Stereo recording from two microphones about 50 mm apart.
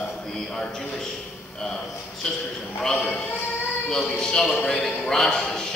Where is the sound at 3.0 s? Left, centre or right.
Left.